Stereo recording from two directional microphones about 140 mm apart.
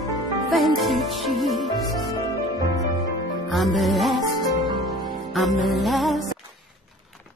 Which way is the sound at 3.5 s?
Centre (ahead or behind).